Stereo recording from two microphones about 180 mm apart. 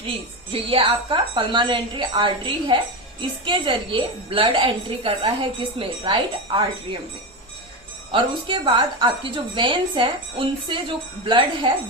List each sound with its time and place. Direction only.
0.5 s a woman's voice: 30° right (ahead or behind)
8.1 s a woman's voice: 25° right (ahead or behind)